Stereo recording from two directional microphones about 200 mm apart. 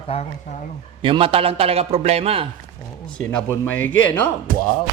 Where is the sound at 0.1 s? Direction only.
35° left (ahead or behind).